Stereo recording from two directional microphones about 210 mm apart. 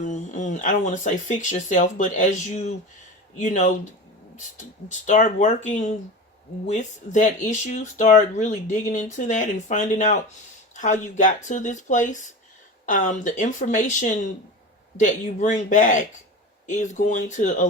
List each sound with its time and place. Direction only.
0.0 s speech: 35° left (ahead or behind)